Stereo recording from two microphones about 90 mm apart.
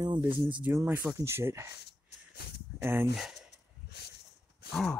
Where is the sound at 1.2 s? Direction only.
30° right (ahead or behind).